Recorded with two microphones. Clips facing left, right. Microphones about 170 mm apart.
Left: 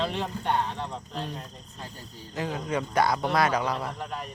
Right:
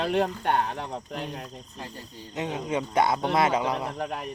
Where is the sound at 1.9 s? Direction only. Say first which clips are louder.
Right 2 dB; 65° right (ahead or behind).